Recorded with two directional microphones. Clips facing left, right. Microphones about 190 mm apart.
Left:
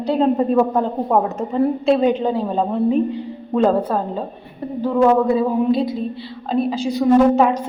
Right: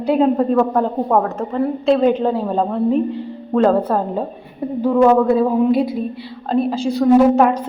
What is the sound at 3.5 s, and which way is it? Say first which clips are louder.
Speech: right 2 dB; 15° left (ahead or behind).